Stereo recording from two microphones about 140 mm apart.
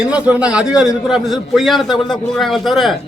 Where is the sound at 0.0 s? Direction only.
10° right (ahead or behind).